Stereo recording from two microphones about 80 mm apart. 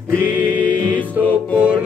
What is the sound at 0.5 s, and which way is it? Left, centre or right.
Music, centre.